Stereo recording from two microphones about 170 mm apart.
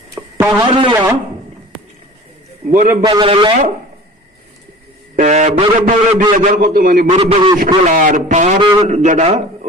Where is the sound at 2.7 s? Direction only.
50° right (ahead or behind).